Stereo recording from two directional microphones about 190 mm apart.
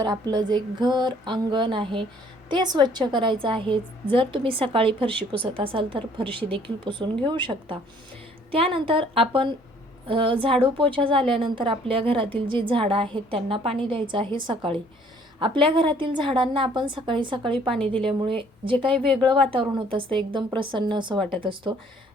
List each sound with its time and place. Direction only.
0.0 s a woman's voice: 20° right (ahead or behind)
17.7 s a woman's voice: 5° left (ahead or behind)
18.2 s a woman's voice: 25° right (ahead or behind)